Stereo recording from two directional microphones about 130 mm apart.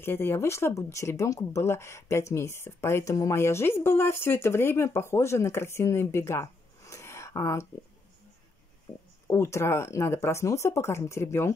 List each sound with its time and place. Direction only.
0.0 s speech: 15° left (ahead or behind)
9.3 s speech: 20° left (ahead or behind)